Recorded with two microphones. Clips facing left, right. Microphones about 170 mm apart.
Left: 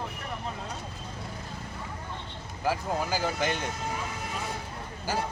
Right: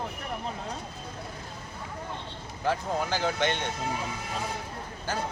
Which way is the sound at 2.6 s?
5° left (ahead or behind).